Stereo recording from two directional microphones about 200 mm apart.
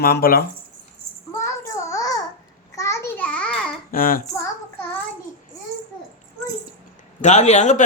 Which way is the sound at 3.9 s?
45° left (ahead or behind).